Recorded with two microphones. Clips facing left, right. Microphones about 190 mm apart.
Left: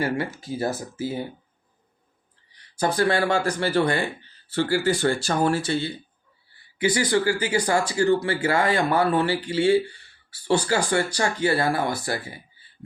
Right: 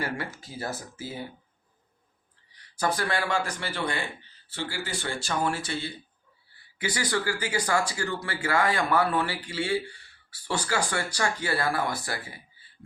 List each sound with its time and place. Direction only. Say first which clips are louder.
0.0 s speech: left 7 dB; 25° left (ahead or behind)
2.7 s speech: left 6 dB; 25° left (ahead or behind)
10.9 s speech: left 6 dB; 25° left (ahead or behind)